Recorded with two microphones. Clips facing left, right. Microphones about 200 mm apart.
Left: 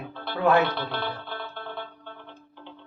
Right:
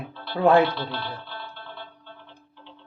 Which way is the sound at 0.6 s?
50° left (ahead or behind).